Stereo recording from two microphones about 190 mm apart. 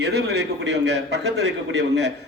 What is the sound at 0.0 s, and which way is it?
A man's voice, 60° right (ahead or behind).